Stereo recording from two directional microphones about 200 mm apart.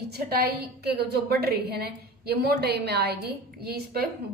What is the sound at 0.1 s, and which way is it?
A woman's voice, 50° right (ahead or behind).